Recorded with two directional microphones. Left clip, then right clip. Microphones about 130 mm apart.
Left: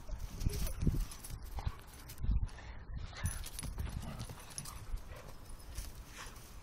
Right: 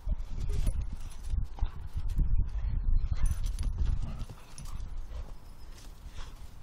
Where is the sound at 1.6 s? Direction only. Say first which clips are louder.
Left 1 dB; 10° right (ahead or behind).